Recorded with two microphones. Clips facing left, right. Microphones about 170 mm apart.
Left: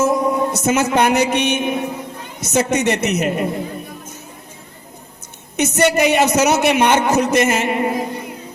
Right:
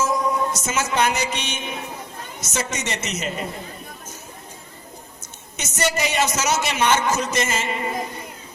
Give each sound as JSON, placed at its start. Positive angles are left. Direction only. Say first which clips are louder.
{"t": 0.0, "sound": "music", "louder": "left 5 dB", "side_deg": 55}
{"t": 2.4, "sound": "a man's voice", "louder": "left 11 dB", "side_deg": 60}
{"t": 5.5, "sound": "a man's voice", "louder": "left 9 dB", "side_deg": 60}